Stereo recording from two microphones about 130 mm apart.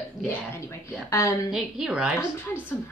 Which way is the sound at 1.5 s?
5° right (ahead or behind).